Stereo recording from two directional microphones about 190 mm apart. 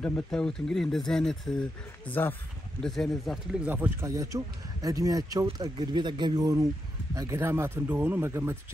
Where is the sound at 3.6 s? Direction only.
10° right (ahead or behind).